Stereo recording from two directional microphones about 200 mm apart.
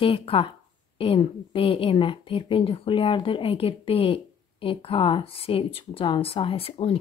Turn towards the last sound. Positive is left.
turn(degrees=30)  # may be behind; listen again after turning